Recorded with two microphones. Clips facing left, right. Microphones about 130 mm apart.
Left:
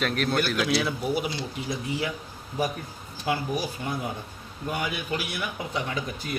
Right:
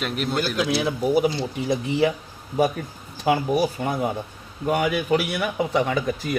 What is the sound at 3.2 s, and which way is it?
Speech, 55° right (ahead or behind).